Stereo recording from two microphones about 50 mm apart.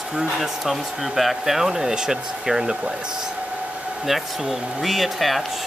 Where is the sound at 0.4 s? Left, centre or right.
Centre.